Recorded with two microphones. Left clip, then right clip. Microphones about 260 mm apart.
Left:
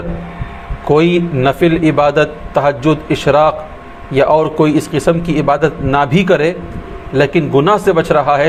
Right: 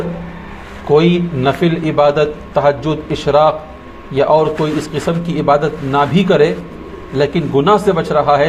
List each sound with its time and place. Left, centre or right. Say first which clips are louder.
0.9 s a man's voice: left 1 dB; left